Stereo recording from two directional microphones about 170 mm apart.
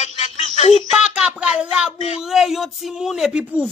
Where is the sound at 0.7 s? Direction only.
Centre (ahead or behind).